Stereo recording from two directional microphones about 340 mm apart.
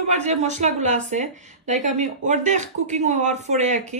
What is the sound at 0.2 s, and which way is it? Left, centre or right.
Speech, centre.